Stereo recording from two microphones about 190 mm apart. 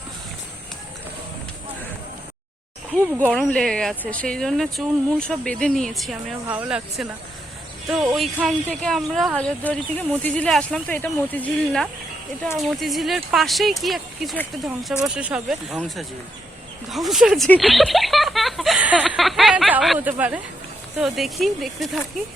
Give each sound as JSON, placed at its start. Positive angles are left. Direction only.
{"t": 2.9, "sound": "speech", "side_deg": -10}
{"t": 3.2, "sound": "speech", "side_deg": 5}